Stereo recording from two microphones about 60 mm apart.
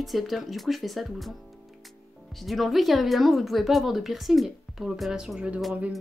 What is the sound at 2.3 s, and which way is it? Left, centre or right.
Speech, centre.